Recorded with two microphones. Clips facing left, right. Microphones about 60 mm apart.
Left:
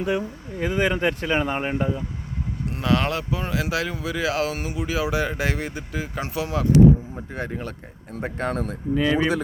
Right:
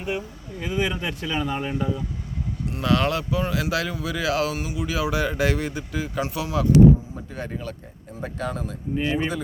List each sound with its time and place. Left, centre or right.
0.0 s speech: left
0.5 s speech: left
7.6 s speech: left
9.1 s speech: left